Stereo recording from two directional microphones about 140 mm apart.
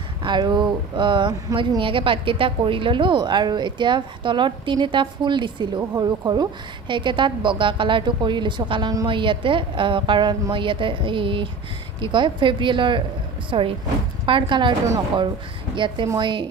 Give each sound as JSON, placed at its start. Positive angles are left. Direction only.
{"t": 0.2, "sound": "speech", "side_deg": -30}
{"t": 15.7, "sound": "speech", "side_deg": -35}